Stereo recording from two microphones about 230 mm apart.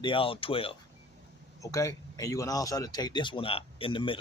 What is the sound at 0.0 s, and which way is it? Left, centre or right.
Speech, left.